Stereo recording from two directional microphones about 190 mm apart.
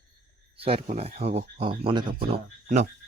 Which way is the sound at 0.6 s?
30° right (ahead or behind).